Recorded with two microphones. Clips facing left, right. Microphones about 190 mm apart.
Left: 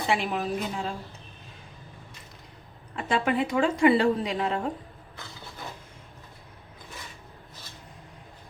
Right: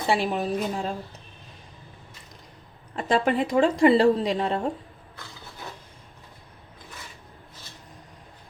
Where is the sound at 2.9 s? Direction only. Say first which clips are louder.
Right 3 dB; 40° right (ahead or behind).